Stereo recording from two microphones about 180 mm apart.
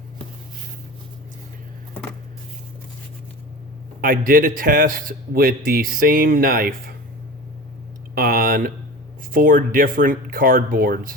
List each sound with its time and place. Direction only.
4.0 s speech: 50° right (ahead or behind)
8.1 s a sound: 55° right (ahead or behind)
9.3 s speech: 50° right (ahead or behind)